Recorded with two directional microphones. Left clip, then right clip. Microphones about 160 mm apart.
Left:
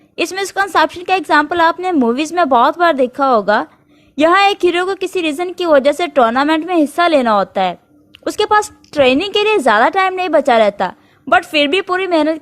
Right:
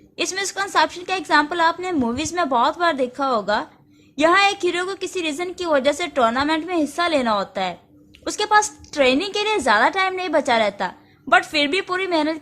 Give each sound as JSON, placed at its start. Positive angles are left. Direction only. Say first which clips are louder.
{"t": 0.2, "sound": "a woman's voice", "louder": "left 7 dB", "side_deg": 45}